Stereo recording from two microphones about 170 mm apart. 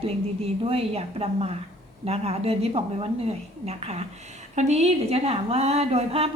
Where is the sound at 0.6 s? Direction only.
35° right (ahead or behind).